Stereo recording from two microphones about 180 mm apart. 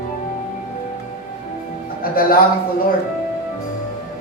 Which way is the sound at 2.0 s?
55° left (ahead or behind).